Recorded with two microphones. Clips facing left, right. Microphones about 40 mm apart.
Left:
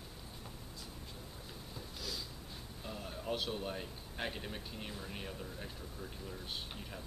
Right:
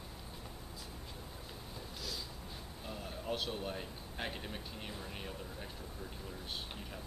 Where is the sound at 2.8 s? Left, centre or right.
Centre.